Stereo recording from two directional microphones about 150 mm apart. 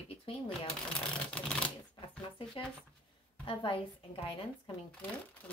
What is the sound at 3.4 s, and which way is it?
Speech, 35° left (ahead or behind).